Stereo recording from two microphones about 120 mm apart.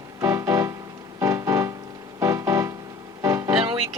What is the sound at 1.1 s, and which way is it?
Keyboard, 25° right (ahead or behind).